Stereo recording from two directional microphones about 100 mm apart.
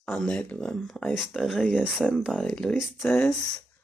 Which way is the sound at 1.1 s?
5° right (ahead or behind).